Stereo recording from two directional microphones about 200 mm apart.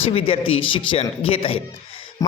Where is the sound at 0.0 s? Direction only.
30° left (ahead or behind).